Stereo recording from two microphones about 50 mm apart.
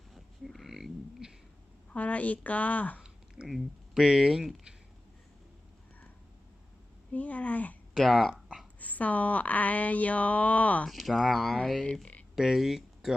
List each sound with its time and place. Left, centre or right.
0.1 s cat: centre
1.9 s speech: left
3.4 s speech: centre
7.1 s speech: left
7.9 s speech: centre
8.8 s speech: left
10.8 s speech: centre